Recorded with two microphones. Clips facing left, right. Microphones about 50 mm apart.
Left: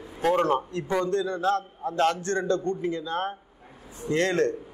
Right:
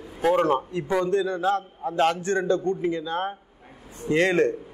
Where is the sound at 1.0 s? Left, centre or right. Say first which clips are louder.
Right 2 dB; centre.